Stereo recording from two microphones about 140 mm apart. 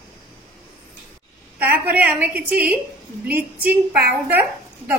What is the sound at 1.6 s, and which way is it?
A woman's voice, 10° right (ahead or behind).